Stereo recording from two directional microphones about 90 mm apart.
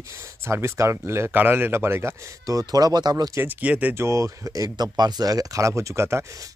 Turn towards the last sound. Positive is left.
turn(degrees=-35)  # may be behind; listen again after turning